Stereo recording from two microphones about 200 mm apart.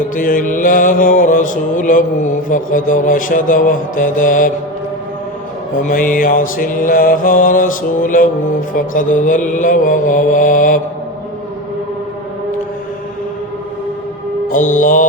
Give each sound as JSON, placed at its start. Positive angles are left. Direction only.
{"t": 0.2, "sound": "mantra", "side_deg": 45}
{"t": 5.8, "sound": "mantra", "side_deg": 40}
{"t": 14.5, "sound": "mantra", "side_deg": 40}